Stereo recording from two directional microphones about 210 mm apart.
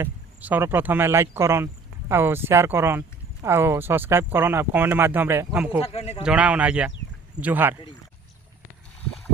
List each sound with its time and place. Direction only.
0.0 s speech: 10° right (ahead or behind)
5.9 s speech: 30° left (ahead or behind)
6.2 s speech: 5° right (ahead or behind)